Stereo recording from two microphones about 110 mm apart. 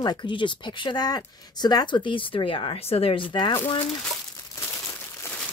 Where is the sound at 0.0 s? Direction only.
40° left (ahead or behind).